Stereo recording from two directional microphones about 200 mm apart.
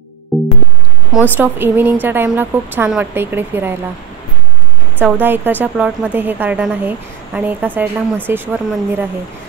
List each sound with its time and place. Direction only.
0.3 s music: centre (ahead or behind)
1.1 s speech: 10° right (ahead or behind)
4.9 s speech: 10° right (ahead or behind)